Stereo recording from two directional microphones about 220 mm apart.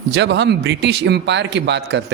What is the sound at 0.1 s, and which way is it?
Speech, 50° right (ahead or behind).